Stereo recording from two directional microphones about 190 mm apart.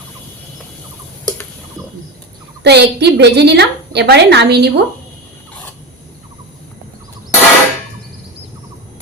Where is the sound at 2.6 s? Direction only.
60° right (ahead or behind).